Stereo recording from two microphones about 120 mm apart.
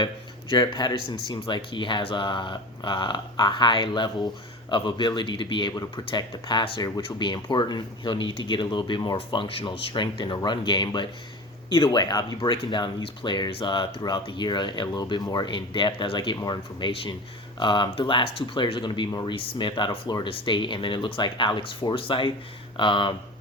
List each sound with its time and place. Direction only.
0.5 s speech: 40° left (ahead or behind)
16.9 s speech: 50° left (ahead or behind)